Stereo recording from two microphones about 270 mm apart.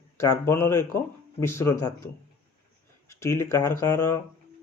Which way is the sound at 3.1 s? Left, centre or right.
Centre.